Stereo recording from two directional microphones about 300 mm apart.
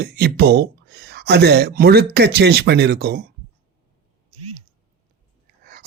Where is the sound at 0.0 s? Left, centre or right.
Right.